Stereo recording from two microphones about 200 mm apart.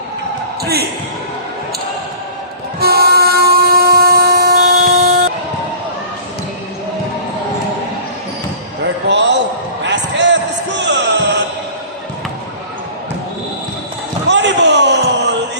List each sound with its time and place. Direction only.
0.6 s speech: 50° right (ahead or behind)
2.8 s train: 50° right (ahead or behind)
9.0 s basketball bounce: 60° right (ahead or behind)
9.8 s music: 60° right (ahead or behind)
14.3 s a sound: 60° right (ahead or behind)